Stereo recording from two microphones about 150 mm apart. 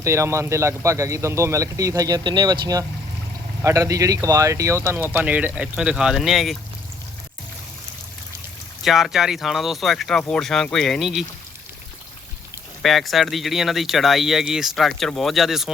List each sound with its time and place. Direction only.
0.0 s speech: 20° right (ahead or behind); by 6.6 s centre (ahead or behind)
8.8 s speech: centre (ahead or behind)
12.8 s speech: centre (ahead or behind)